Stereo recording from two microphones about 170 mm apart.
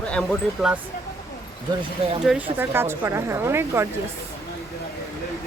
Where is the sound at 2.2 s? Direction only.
10° right (ahead or behind).